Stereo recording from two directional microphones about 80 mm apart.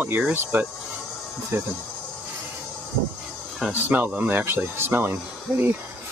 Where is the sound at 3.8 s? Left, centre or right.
Right.